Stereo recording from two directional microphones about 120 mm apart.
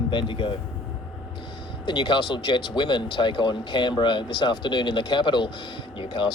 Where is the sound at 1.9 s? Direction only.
40° left (ahead or behind).